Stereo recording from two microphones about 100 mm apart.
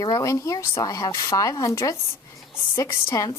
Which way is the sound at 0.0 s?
40° left (ahead or behind).